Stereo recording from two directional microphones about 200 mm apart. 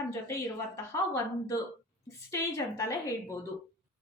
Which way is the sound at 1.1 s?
15° left (ahead or behind).